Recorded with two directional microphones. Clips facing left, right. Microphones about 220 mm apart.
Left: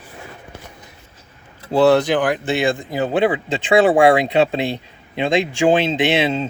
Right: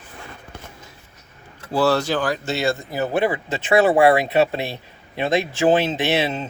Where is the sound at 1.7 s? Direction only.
20° left (ahead or behind).